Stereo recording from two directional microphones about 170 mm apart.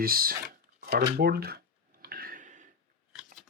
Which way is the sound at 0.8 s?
60° right (ahead or behind).